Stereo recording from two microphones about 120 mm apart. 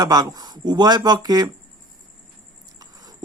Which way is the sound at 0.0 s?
35° right (ahead or behind).